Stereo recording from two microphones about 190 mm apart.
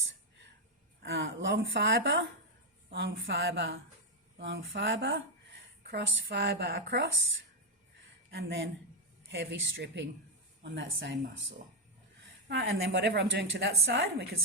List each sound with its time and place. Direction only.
1.0 s a woman's voice: 75° right (ahead or behind)
4.4 s speech: 65° right (ahead or behind); by 5.2 s 80° right
5.8 s a woman's voice: 65° right (ahead or behind)
8.4 s a woman's voice: 75° right (ahead or behind)
12.5 s a woman's voice: 80° right